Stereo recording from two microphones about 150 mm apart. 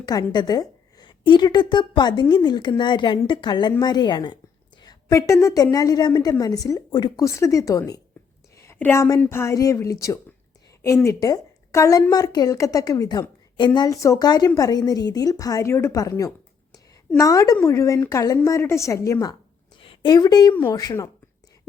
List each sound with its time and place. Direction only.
0.0 s a woman's voice: 25° left (ahead or behind)
19.8 s a woman's voice: 35° left (ahead or behind)